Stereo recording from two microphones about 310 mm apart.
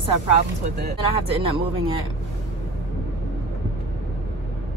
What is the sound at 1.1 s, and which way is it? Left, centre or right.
Speech, centre.